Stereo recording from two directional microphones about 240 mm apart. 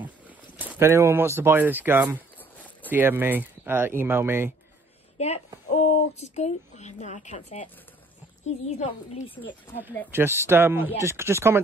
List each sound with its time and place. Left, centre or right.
0.6 s speech: centre
2.1 s walk: centre
2.9 s speech: centre
5.1 s a woman's voice: left
8.6 s a woman's voice: left
10.1 s speech: centre